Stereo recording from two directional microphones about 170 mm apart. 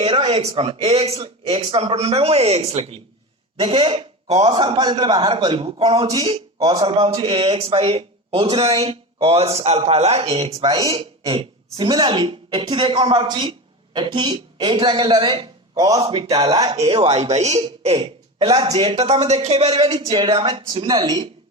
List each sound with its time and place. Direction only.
0.0 s a man's voice: 35° right (ahead or behind)
16.0 s a man's voice: 35° right (ahead or behind)
16.7 s a man's voice: 35° right (ahead or behind)